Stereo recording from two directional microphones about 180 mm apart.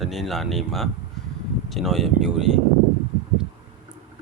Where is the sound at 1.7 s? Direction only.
Centre (ahead or behind).